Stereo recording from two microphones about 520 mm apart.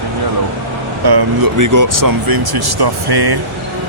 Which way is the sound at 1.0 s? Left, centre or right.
Right.